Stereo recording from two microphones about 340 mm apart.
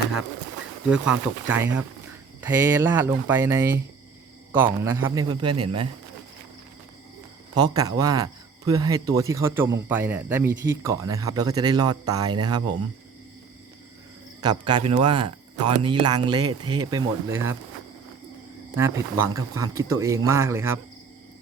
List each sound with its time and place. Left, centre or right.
0.9 s speech: centre
7.5 s speech: centre
14.4 s speech: centre
18.8 s speech: centre